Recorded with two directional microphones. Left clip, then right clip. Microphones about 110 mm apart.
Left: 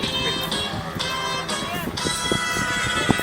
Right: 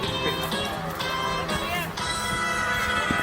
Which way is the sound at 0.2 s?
35° left (ahead or behind).